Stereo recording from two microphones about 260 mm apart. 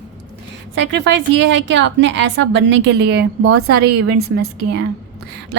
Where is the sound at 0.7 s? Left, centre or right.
Right.